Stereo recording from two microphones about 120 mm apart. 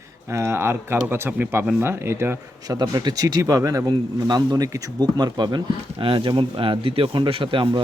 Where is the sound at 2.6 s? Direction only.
30° right (ahead or behind).